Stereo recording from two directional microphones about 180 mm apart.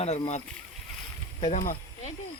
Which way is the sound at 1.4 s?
45° left (ahead or behind).